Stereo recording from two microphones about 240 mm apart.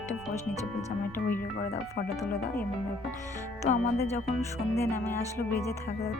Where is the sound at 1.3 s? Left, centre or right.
Left.